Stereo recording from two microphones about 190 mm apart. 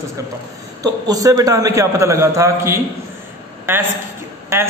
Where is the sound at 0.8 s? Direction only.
20° right (ahead or behind).